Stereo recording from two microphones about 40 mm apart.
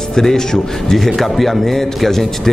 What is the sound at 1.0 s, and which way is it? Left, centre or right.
Speech, centre.